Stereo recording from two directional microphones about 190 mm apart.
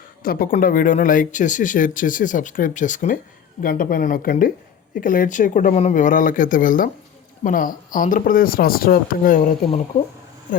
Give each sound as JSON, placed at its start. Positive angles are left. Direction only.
{"t": 0.2, "sound": "speech", "side_deg": 50}